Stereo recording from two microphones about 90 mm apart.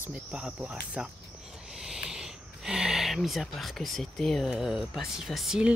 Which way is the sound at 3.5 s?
Centre (ahead or behind).